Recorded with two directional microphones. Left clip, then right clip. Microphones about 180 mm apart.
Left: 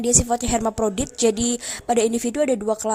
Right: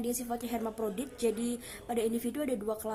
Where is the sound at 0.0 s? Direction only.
45° left (ahead or behind).